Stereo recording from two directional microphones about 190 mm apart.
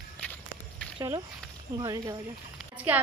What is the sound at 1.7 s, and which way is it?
Speech, 20° right (ahead or behind).